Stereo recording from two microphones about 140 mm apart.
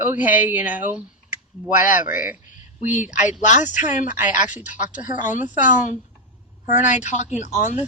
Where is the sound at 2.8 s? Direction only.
60° left (ahead or behind).